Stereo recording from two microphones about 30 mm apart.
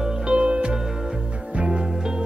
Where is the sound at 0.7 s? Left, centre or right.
Centre.